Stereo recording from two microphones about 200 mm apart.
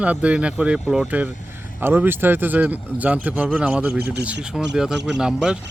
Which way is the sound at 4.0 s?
55° right (ahead or behind).